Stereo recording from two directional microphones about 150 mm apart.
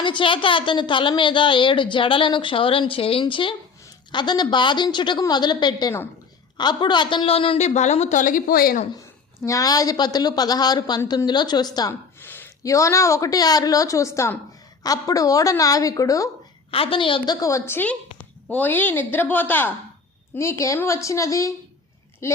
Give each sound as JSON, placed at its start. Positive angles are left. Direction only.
{"t": 0.0, "sound": "a woman's voice", "side_deg": 35}
{"t": 7.7, "sound": "a woman's voice", "side_deg": 50}
{"t": 9.4, "sound": "a woman's voice", "side_deg": 20}
{"t": 12.2, "sound": "a woman's voice", "side_deg": 15}
{"t": 16.7, "sound": "a woman's voice", "side_deg": 35}
{"t": 17.4, "sound": "a woman's voice", "side_deg": 20}